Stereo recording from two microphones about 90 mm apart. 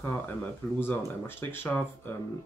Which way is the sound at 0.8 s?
25° left (ahead or behind).